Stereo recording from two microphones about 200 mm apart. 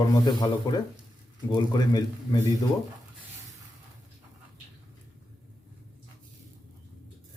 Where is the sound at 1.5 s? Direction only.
20° left (ahead or behind).